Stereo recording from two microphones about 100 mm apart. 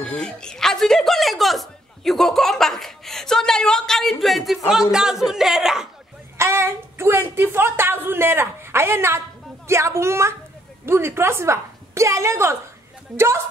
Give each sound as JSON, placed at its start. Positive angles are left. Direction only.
{"t": 0.0, "sound": "speech", "side_deg": 10}
{"t": 6.3, "sound": "speech", "side_deg": -25}